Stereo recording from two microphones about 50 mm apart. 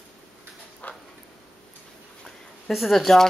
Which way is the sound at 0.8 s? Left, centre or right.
Left.